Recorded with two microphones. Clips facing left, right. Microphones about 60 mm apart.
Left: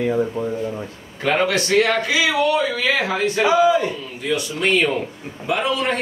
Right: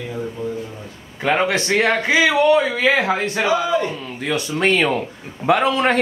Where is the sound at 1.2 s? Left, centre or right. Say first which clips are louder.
Right 1 dB; centre.